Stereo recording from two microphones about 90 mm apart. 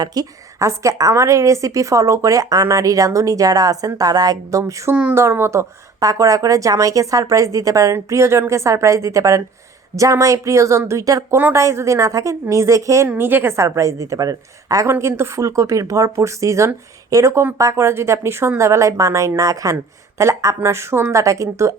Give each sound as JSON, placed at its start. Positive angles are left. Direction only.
{"t": 0.0, "sound": "a woman's voice", "side_deg": -45}
{"t": 13.1, "sound": "speech", "side_deg": -25}
{"t": 14.8, "sound": "speech", "side_deg": -30}